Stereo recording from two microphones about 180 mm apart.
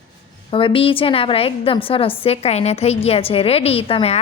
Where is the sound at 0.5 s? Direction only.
30° left (ahead or behind).